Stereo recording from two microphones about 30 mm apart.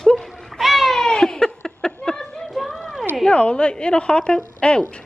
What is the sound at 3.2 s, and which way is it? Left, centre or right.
A woman's voice, left.